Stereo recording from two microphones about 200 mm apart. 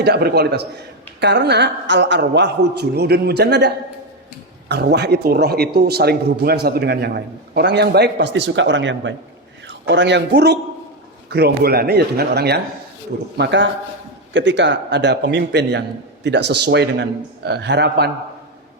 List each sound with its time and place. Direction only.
0.0 s a man's voice: 55° right (ahead or behind)
4.7 s a man's voice: 55° right (ahead or behind)